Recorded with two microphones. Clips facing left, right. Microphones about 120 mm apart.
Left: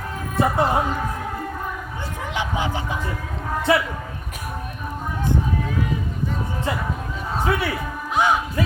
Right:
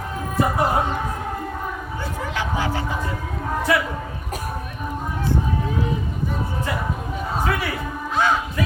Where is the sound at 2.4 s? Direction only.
20° left (ahead or behind).